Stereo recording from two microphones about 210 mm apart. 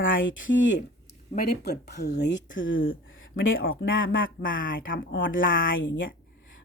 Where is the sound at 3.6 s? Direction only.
45° left (ahead or behind).